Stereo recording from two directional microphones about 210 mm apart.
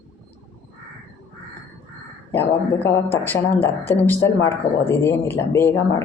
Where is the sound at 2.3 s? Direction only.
10° left (ahead or behind).